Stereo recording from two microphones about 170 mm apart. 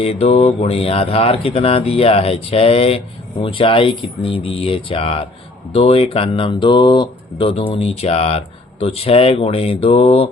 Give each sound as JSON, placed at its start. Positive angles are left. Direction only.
{"t": 0.0, "sound": "speech", "side_deg": 35}